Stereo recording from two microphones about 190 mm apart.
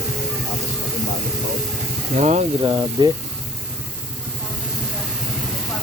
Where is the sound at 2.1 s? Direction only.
40° right (ahead or behind).